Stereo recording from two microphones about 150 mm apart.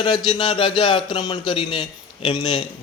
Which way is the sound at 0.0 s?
30° left (ahead or behind).